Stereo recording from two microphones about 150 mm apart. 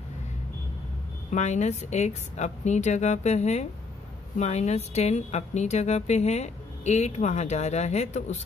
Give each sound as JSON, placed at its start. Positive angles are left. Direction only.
{"t": 1.3, "sound": "a woman's voice", "side_deg": 50}